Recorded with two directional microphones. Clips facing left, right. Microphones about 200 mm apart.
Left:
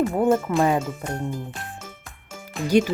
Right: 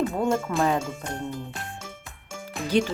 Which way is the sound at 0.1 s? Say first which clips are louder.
Left 5 dB; 15° left (ahead or behind).